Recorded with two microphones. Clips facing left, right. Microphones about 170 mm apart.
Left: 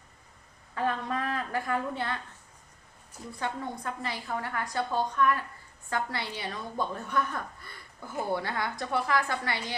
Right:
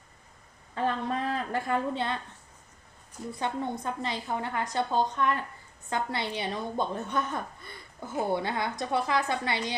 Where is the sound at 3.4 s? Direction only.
20° right (ahead or behind).